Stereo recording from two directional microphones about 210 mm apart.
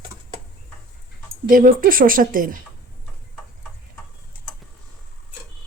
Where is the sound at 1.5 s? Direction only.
40° right (ahead or behind).